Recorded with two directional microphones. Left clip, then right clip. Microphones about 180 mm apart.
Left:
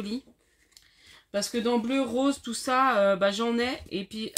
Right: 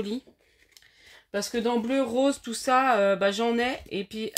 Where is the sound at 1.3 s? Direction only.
45° right (ahead or behind).